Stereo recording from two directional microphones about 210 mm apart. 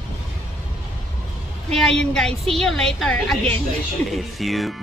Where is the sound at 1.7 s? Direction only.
5° left (ahead or behind).